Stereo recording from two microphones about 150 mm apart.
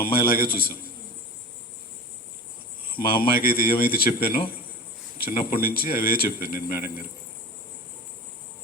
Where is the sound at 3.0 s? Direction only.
80° left.